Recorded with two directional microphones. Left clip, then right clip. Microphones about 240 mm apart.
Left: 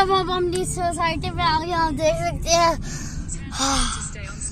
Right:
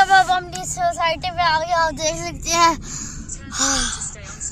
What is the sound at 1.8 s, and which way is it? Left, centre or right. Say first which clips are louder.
Speech: even; right.